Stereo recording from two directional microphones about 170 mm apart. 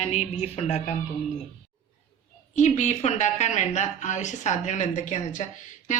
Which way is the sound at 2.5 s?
45° left (ahead or behind).